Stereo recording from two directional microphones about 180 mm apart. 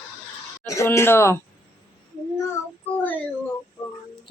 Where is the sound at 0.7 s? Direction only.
15° left (ahead or behind).